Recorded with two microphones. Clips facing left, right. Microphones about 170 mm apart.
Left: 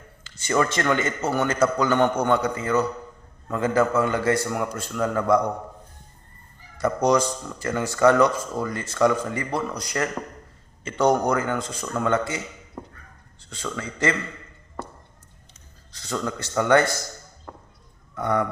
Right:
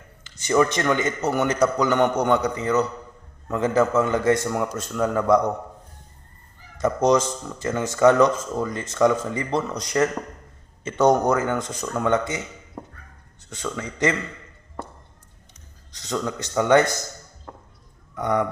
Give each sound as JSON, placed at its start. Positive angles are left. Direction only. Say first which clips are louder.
{"t": 0.3, "sound": "a man's voice", "louder": "right 3 dB", "side_deg": -15}
{"t": 6.7, "sound": "speech", "louder": "right 1 dB", "side_deg": -20}
{"t": 12.8, "sound": "a sound", "louder": "even", "side_deg": -10}
{"t": 13.5, "sound": "speech", "louder": "right 1 dB", "side_deg": -20}
{"t": 15.9, "sound": "speech", "louder": "right 1 dB", "side_deg": -20}
{"t": 18.2, "sound": "a man's voice", "louder": "right 1 dB", "side_deg": -15}